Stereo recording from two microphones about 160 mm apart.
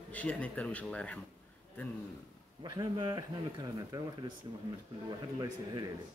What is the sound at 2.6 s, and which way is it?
Speech, 25° right (ahead or behind).